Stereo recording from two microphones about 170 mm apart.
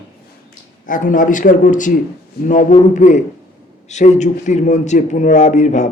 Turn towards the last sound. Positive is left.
turn(degrees=45)  # may be behind; listen again after turning